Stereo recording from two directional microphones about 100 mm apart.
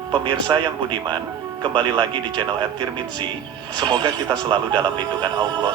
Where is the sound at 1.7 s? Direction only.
50° right (ahead or behind).